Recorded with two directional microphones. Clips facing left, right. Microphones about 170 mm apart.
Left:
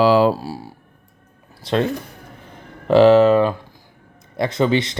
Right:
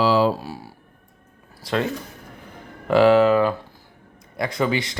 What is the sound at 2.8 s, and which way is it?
Speech, 25° left (ahead or behind).